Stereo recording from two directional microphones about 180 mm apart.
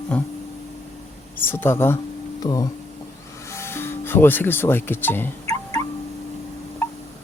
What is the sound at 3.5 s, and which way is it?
Music, 15° left (ahead or behind).